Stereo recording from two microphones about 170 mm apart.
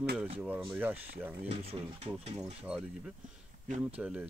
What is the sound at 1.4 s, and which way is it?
Speech, 35° right (ahead or behind).